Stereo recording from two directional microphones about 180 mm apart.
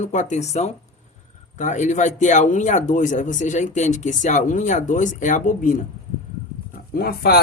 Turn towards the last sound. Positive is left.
turn(degrees=60)  # may be behind; listen again after turning